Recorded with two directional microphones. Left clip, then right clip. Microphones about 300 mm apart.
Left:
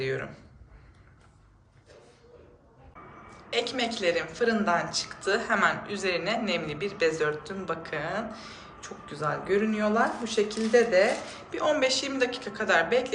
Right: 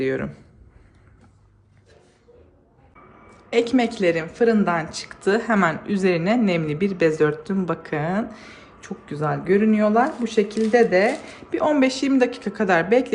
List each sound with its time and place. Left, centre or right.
0.0 s speech: centre
3.5 s speech: centre